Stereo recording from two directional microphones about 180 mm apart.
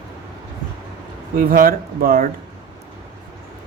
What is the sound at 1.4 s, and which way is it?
Speech, 50° right (ahead or behind).